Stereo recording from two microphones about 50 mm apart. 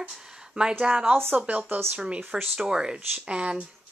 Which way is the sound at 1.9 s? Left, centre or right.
Right.